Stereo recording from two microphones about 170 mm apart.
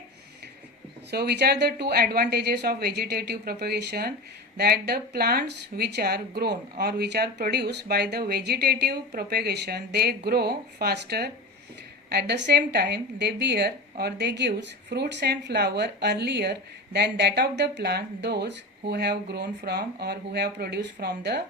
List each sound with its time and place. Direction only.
1.1 s speech: 75° right (ahead or behind)